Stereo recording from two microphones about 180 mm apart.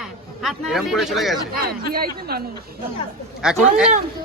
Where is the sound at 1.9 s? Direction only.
55° right (ahead or behind).